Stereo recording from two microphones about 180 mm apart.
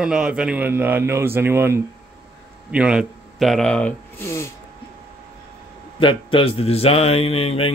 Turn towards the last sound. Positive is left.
turn(degrees=35)  # may be behind; listen again after turning